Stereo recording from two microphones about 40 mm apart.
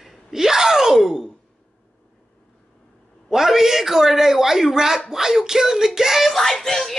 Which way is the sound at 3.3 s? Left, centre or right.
Centre.